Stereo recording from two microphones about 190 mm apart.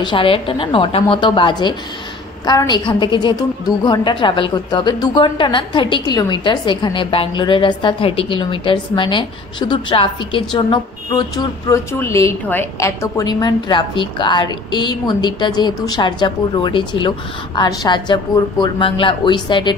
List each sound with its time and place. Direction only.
0.0 s a woman's voice: 25° left (ahead or behind)